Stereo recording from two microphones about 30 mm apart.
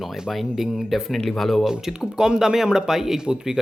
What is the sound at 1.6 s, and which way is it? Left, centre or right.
Speech, centre.